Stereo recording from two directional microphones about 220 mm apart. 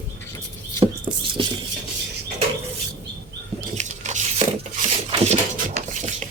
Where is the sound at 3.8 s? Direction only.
30° right (ahead or behind).